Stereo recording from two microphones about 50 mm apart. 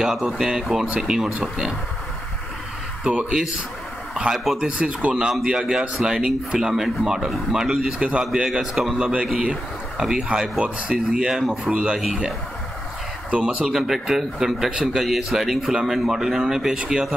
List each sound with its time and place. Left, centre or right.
0.0 s speech: centre
0.8 s speech: right
1.1 s speech: centre
3.0 s speech: centre
5.4 s speech: centre
6.7 s speech: centre
8.0 s speech: right
8.5 s speech: centre
8.9 s speech: centre
11.7 s speech: right
13.4 s speech: centre
13.7 s speech: centre
16.7 s speech: centre